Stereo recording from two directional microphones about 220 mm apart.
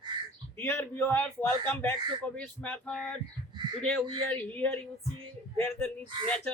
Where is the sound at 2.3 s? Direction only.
5° left (ahead or behind).